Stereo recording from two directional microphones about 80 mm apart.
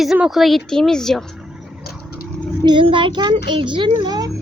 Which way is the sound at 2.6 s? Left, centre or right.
Right.